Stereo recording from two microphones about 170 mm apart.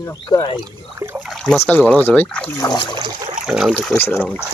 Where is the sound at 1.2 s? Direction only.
Centre (ahead or behind).